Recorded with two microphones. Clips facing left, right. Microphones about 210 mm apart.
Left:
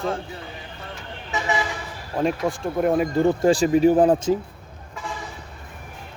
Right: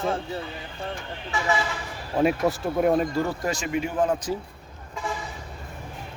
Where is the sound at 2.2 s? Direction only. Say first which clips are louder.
Right 1 dB; centre (ahead or behind).